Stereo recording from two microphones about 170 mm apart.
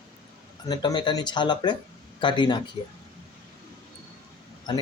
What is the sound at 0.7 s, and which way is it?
Speech, 25° left (ahead or behind).